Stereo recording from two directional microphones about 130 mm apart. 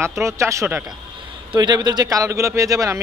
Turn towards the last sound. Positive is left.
turn(degrees=-25)  # may be behind; listen again after turning